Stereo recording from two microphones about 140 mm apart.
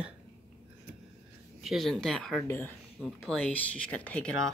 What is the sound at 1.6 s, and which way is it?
Speech, centre (ahead or behind).